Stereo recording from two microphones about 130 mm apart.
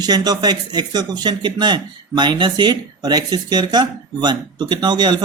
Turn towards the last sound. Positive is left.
turn(degrees=-35)  # may be behind; listen again after turning